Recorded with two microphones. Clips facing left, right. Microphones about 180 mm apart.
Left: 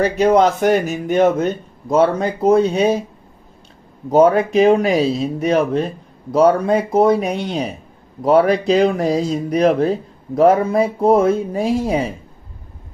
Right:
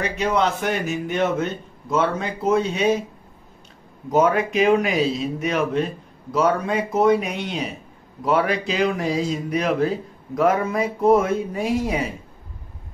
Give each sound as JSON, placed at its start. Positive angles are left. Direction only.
{"t": 0.0, "sound": "a man's voice", "side_deg": 45}
{"t": 4.1, "sound": "a man's voice", "side_deg": 30}